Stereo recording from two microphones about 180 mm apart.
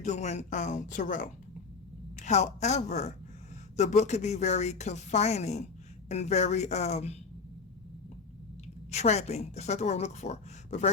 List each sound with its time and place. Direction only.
0.0 s a woman's voice: 40° left (ahead or behind)
8.9 s a woman's voice: 40° left (ahead or behind)